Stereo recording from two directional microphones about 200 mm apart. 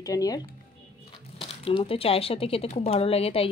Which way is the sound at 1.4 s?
25° left (ahead or behind).